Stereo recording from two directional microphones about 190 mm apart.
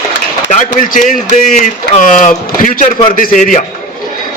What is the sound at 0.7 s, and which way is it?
Speech, 45° left (ahead or behind).